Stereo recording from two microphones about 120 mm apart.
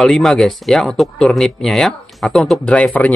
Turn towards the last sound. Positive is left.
turn(degrees=10)  # may be behind; listen again after turning